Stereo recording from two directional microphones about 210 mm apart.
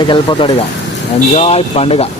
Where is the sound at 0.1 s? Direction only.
25° left (ahead or behind).